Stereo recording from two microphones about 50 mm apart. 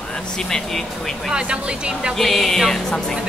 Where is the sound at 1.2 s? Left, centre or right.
Centre.